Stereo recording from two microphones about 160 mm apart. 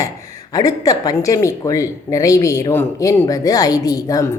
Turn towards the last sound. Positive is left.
turn(degrees=20)  # may be behind; listen again after turning